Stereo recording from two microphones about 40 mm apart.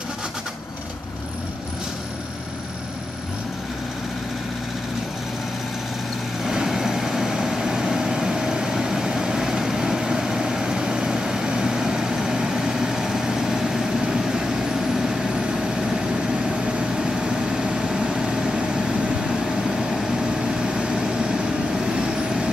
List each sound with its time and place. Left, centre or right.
6.4 s vehicle: centre
19.4 s vehicle: centre